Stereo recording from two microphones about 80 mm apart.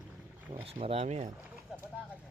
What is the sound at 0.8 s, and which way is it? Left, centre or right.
Speech, right.